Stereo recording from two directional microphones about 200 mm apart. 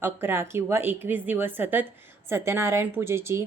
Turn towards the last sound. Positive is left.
turn(degrees=-10)  # may be behind; listen again after turning